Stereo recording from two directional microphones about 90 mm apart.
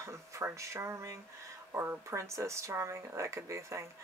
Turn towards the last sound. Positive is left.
turn(degrees=-35)  # may be behind; listen again after turning